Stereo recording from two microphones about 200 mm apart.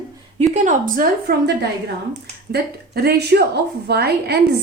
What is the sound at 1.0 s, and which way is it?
A woman's voice, 50° right (ahead or behind).